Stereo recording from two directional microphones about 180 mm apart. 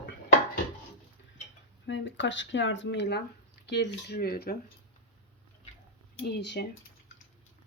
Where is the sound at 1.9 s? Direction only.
90° left; by 4.5 s 60° left (ahead or behind).